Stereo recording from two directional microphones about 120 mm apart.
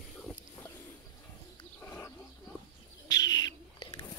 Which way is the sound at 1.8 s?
15° left (ahead or behind).